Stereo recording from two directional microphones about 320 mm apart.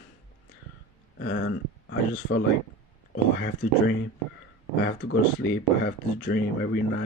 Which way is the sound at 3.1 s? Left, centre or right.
Left.